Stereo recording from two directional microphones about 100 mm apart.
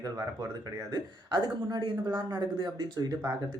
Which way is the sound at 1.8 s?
50° right (ahead or behind).